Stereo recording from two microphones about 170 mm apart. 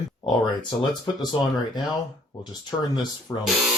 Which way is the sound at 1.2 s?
25° left (ahead or behind).